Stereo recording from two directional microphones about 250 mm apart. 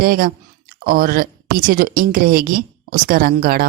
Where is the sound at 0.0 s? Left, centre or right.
Right.